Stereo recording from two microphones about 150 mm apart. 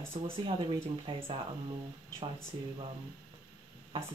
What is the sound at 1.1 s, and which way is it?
Speech, 35° right (ahead or behind).